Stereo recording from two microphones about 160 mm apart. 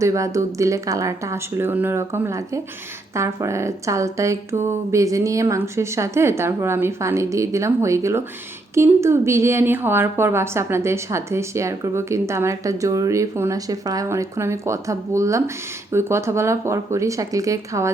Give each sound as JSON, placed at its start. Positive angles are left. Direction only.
{"t": 0.0, "sound": "a woman's voice", "side_deg": -20}